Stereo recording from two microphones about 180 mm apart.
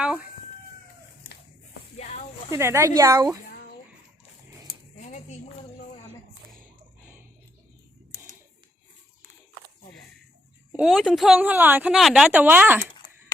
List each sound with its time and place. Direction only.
0.0 s speech: 5° right (ahead or behind)
2.0 s a sound: 40° left (ahead or behind)
2.5 s speech: 15° right (ahead or behind)
7.0 s a sound: 10° right (ahead or behind)
10.7 s speech: 5° right (ahead or behind)
13.0 s dishes: 25° left (ahead or behind)